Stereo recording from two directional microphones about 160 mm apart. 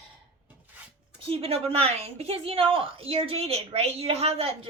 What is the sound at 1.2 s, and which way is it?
Speech, 40° right (ahead or behind).